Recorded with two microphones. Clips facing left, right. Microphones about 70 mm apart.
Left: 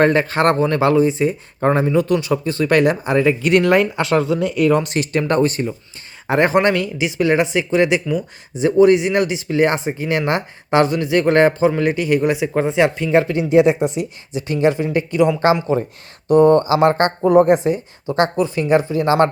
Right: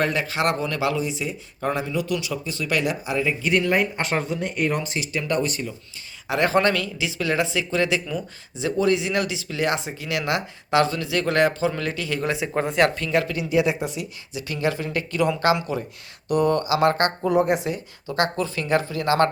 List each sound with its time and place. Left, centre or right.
0.0 s speech: left
5.3 s speech: left
6.5 s speech: left
12.5 s speech: centre
13.0 s speech: left